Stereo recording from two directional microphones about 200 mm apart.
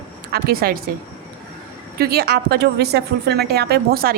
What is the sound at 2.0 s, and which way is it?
A woman's voice, 50° right (ahead or behind).